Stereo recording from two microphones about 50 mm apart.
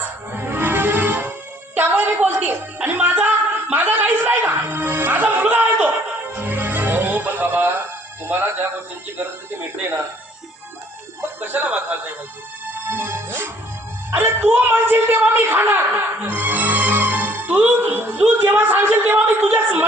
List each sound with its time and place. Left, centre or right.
0.0 s music: right
2.8 s a sound: right
11.3 s speech: right
12.8 s music: right
14.1 s speech: right